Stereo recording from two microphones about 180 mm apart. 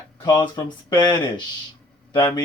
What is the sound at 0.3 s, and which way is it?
Speech, 25° left (ahead or behind).